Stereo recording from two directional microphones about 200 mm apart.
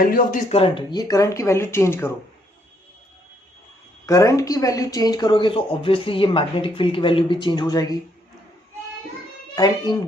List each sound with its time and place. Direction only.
0.0 s speech: 40° left (ahead or behind); by 2.1 s 10° left (ahead or behind)
4.0 s speech: 15° left (ahead or behind)
9.6 s speech: 20° left (ahead or behind)